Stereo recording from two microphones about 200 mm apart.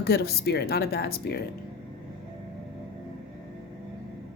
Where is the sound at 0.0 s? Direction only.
50° left (ahead or behind).